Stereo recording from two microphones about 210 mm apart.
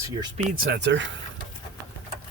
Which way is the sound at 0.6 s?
55° right (ahead or behind).